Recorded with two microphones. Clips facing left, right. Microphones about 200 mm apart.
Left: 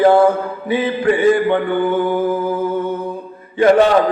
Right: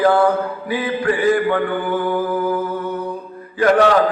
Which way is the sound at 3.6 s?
25° left (ahead or behind).